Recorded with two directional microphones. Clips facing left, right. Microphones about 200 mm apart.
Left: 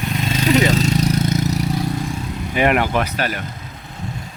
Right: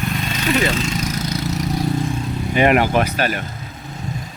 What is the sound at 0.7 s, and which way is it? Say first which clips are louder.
Vehicle: left 5 dB; 40° left (ahead or behind).